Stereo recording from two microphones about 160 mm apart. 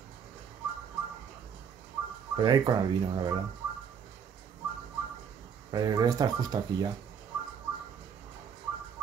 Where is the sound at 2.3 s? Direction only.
25° right (ahead or behind).